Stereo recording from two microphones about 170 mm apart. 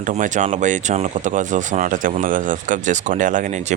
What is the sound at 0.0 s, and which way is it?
A man's voice, 50° right (ahead or behind).